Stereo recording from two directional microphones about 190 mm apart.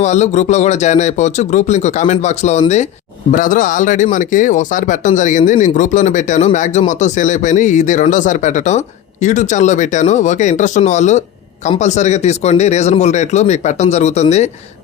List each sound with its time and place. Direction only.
0.0 s speech: 35° left (ahead or behind)